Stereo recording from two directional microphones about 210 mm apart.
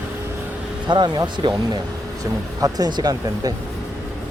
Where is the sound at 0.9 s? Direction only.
20° right (ahead or behind).